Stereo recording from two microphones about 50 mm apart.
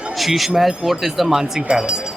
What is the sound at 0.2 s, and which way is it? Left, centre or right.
Speech, centre.